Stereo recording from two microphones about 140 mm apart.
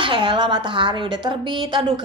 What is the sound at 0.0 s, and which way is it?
A woman's voice, 35° right (ahead or behind).